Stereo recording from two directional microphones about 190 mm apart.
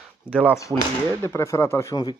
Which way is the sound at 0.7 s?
20° right (ahead or behind).